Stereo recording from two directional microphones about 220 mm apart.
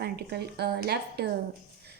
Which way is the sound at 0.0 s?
45° right (ahead or behind).